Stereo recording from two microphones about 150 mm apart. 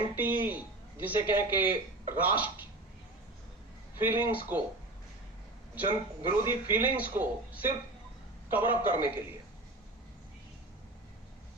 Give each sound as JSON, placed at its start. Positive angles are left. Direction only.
{"t": 0.2, "sound": "a man's voice", "side_deg": -10}
{"t": 4.4, "sound": "a man's voice", "side_deg": -10}
{"t": 5.7, "sound": "a man's voice", "side_deg": -15}